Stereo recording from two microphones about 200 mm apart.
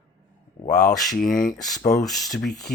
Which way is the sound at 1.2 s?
45° left (ahead or behind).